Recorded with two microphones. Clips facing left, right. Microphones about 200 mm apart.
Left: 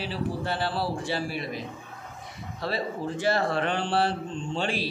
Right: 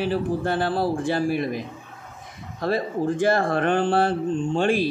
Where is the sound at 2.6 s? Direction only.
50° right (ahead or behind).